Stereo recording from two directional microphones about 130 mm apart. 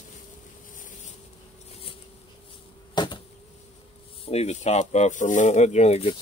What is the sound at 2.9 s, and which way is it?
Insect, 35° left (ahead or behind).